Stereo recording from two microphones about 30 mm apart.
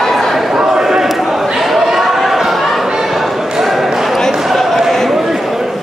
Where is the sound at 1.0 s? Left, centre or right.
Centre.